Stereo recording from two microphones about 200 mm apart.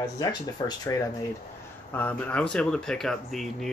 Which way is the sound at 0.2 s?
20° left (ahead or behind).